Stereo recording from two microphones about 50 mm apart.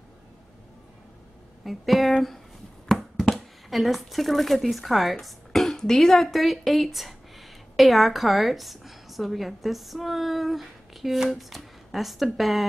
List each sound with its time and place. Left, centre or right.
1.6 s speech: centre
2.9 s a sound: centre
3.7 s speech: centre